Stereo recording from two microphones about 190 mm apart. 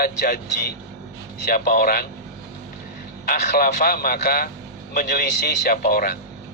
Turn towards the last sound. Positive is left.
turn(degrees=55)  # may be behind; listen again after turning